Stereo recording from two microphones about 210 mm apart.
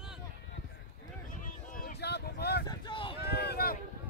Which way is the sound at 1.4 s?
40° left (ahead or behind).